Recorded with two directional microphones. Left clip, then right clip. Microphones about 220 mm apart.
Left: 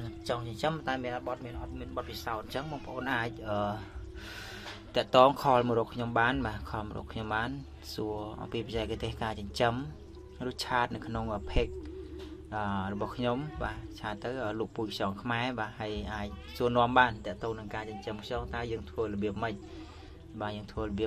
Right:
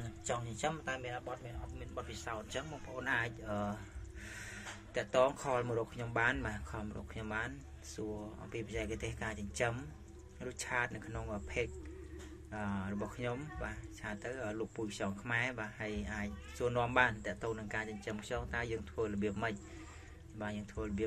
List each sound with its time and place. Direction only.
0.3 s speech: 30° left (ahead or behind)
4.9 s speech: 35° left (ahead or behind)